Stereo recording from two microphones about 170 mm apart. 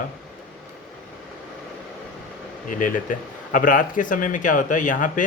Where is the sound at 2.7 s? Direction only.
50° left (ahead or behind).